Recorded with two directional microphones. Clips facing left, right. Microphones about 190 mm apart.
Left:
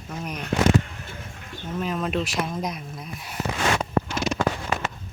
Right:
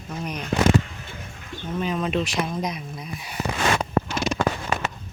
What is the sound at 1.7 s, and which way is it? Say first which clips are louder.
Speech: right 2 dB; centre (ahead or behind).